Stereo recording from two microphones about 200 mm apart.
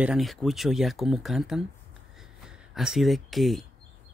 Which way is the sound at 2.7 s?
Centre (ahead or behind).